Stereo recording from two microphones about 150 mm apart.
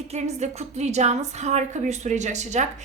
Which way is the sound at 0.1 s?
50° right (ahead or behind).